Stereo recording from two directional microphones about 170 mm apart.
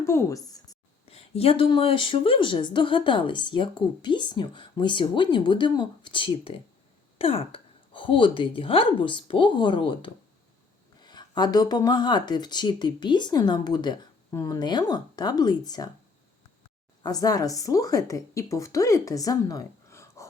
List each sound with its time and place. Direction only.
0.0 s speech: 15° left (ahead or behind)
1.0 s speech: 35° left (ahead or behind)
17.0 s speech: 20° left (ahead or behind)